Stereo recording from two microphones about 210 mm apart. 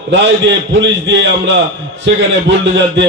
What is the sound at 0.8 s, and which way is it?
A man's voice, 60° right (ahead or behind).